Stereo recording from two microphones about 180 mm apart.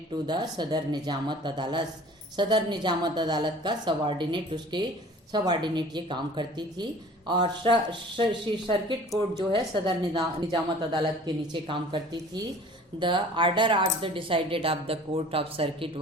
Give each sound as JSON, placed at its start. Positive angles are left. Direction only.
{"t": 0.3, "sound": "a woman's voice", "side_deg": -25}